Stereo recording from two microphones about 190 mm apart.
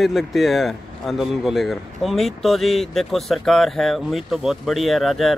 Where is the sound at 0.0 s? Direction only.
Centre (ahead or behind).